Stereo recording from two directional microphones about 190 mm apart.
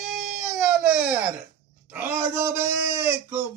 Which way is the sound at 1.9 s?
10° right (ahead or behind).